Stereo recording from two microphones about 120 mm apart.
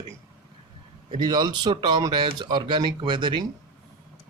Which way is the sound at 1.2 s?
35° right (ahead or behind).